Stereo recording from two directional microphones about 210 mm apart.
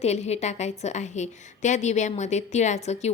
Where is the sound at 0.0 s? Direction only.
30° left (ahead or behind).